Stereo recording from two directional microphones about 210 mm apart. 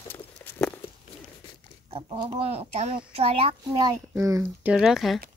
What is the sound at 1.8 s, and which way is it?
Speech, 25° right (ahead or behind).